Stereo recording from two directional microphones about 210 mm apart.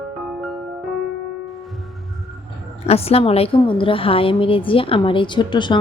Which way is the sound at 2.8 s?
30° left (ahead or behind).